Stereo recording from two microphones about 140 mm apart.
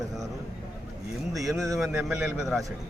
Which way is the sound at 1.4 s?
Centre (ahead or behind).